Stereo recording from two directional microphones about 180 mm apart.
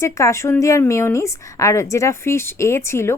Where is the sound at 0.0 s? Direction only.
15° left (ahead or behind).